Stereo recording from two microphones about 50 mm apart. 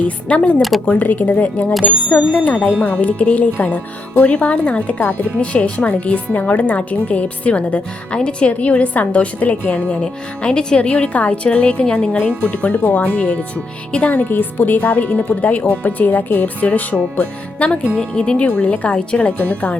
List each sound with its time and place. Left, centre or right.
0.0 s speech: left
17.9 s speech: centre